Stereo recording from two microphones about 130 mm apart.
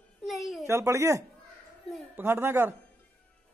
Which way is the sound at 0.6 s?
25° right (ahead or behind).